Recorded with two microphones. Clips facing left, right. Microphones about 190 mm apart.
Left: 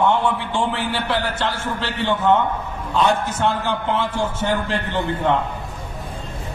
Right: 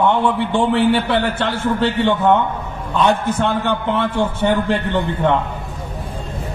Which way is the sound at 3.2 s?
60° right (ahead or behind).